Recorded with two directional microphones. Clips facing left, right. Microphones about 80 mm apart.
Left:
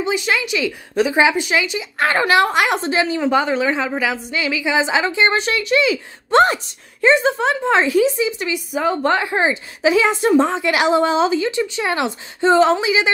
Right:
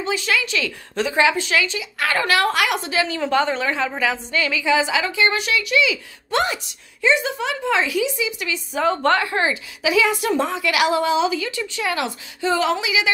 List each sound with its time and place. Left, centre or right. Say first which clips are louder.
0.0 s a woman's voice: left 3 dB; centre
3.2 s a woman's voice: left 3 dB; centre; by 8.5 s left
8.7 s a woman's voice: even; centre
9.1 s a woman's voice: left 2 dB; left
9.8 s a woman's voice: left 4 dB; left